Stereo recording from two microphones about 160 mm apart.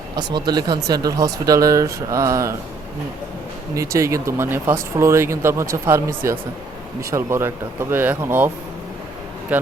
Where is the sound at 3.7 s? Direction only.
20° right (ahead or behind).